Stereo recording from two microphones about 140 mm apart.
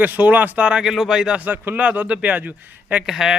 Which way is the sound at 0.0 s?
15° right (ahead or behind).